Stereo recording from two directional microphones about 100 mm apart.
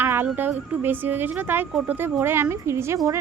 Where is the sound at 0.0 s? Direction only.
20° right (ahead or behind).